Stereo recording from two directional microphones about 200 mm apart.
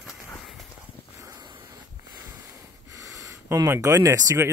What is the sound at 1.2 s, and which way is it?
Wind, 20° right (ahead or behind).